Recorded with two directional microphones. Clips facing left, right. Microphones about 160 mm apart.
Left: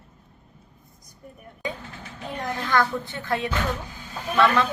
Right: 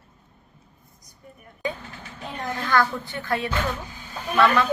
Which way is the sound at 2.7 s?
20° left (ahead or behind).